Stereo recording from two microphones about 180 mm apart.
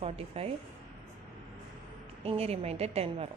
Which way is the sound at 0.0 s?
35° right (ahead or behind).